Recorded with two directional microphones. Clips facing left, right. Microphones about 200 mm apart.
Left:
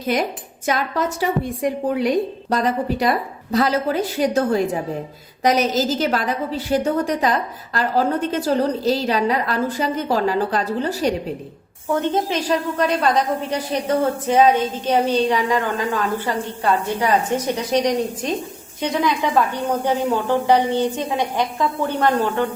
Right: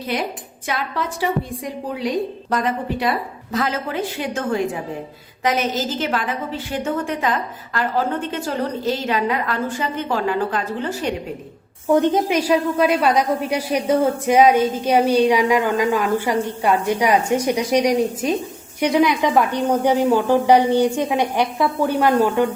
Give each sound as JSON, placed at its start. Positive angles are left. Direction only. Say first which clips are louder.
{"t": 0.1, "sound": "speech", "louder": "left 4 dB", "side_deg": 45}
{"t": 2.5, "sound": "a woman's voice", "louder": "left 2 dB", "side_deg": 35}
{"t": 11.9, "sound": "a woman's voice", "louder": "right 4 dB", "side_deg": -15}